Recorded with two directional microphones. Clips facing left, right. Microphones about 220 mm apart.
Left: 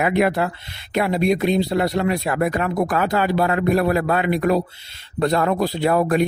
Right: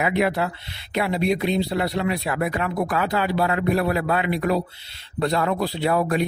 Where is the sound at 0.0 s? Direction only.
50° left (ahead or behind).